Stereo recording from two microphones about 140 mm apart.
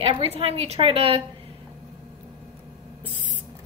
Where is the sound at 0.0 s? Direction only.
40° right (ahead or behind).